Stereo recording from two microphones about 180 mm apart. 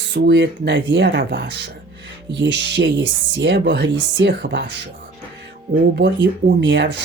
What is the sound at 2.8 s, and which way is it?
Speech, 65° right (ahead or behind).